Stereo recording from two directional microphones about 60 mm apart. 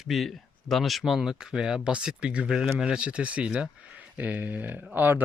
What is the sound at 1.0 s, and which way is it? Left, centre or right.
Speech, centre.